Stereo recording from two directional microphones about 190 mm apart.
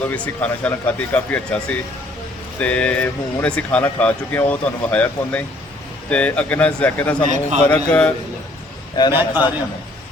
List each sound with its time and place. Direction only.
0.1 s speech: 5° left (ahead or behind)
7.3 s a man's voice: 40° right (ahead or behind)
7.6 s speech: 5° left (ahead or behind)
9.0 s a man's voice: 20° left (ahead or behind)